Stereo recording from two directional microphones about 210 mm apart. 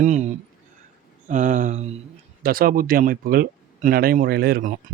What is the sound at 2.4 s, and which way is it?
Speech, 45° right (ahead or behind).